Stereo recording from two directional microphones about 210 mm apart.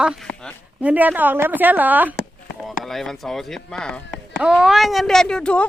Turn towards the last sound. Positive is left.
turn(degrees=5)  # may be behind; listen again after turning